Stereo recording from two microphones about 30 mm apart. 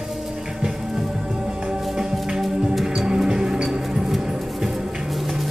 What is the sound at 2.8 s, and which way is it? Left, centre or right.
Music, right.